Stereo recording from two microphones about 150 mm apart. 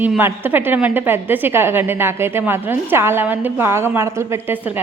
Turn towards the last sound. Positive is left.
turn(degrees=-15)  # may be behind; listen again after turning